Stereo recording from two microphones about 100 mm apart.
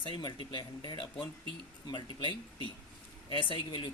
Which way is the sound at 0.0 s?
50° left (ahead or behind).